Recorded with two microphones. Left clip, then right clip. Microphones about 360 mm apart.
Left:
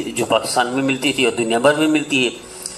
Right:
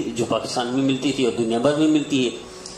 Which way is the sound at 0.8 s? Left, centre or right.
Left.